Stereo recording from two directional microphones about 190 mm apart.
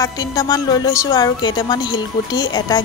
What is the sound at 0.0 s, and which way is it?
A woman's voice, 20° left (ahead or behind).